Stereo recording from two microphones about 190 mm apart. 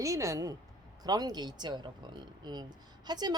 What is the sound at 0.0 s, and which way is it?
Speech, 15° right (ahead or behind).